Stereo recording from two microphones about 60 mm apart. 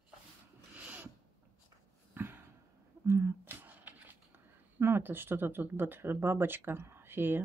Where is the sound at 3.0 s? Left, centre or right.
Right.